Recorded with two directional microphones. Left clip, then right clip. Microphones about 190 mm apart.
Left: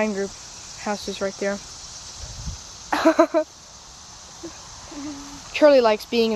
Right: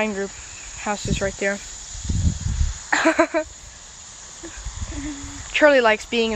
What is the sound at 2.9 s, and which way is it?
Speech, 5° left (ahead or behind).